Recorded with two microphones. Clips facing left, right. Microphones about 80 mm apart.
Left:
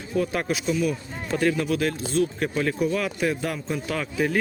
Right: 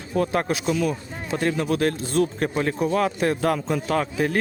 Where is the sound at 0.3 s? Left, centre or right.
Right.